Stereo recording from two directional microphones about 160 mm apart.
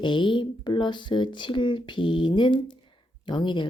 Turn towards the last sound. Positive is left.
turn(degrees=30)  # may be behind; listen again after turning